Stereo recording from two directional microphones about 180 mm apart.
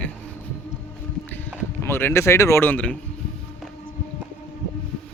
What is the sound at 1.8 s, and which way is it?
Speech, 10° left (ahead or behind).